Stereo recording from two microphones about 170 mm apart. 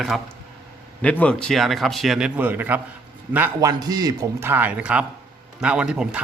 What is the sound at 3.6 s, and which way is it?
A man's voice, 20° right (ahead or behind).